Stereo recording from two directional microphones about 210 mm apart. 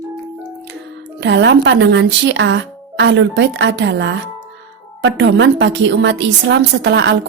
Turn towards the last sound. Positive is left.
turn(degrees=-55)  # may be behind; listen again after turning